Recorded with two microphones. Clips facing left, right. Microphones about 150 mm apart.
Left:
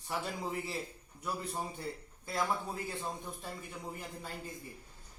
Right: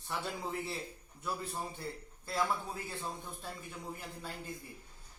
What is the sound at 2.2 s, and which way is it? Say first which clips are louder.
Speech: right 1 dB; 15° left (ahead or behind).